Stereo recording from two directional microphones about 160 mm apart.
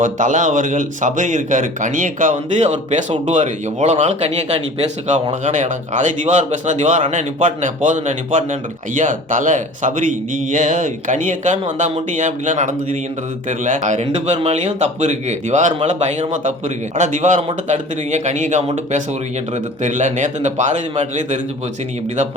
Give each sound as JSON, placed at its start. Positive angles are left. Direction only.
{"t": 0.0, "sound": "speech", "side_deg": -50}